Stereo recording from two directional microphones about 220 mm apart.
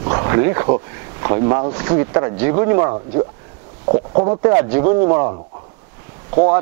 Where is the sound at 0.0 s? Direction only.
20° right (ahead or behind).